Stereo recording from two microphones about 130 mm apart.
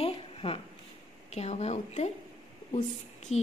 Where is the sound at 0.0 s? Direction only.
45° left (ahead or behind).